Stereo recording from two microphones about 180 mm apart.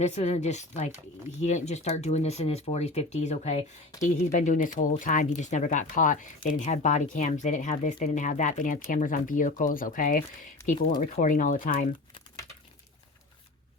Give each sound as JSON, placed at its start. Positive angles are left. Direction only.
{"t": 0.0, "sound": "speech", "side_deg": 40}
{"t": 10.8, "sound": "speech", "side_deg": 25}
{"t": 11.0, "sound": "speech", "side_deg": 50}